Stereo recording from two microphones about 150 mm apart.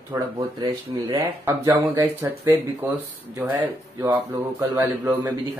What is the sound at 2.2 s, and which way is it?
Speech, 15° right (ahead or behind).